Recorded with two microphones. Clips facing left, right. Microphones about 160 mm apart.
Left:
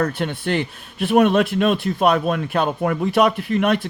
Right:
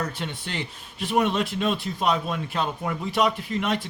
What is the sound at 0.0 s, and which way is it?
Speech, 60° left (ahead or behind).